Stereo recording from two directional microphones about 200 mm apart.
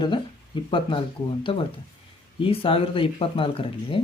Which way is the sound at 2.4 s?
25° left (ahead or behind).